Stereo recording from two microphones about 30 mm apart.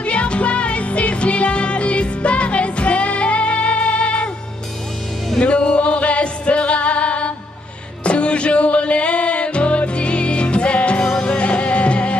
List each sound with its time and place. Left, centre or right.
0.0 s music: left
5.4 s music: left